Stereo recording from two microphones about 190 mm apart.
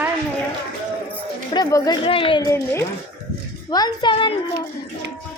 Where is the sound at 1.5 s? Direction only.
20° left (ahead or behind).